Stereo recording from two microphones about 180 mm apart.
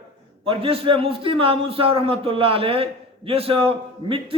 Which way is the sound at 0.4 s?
30° right (ahead or behind).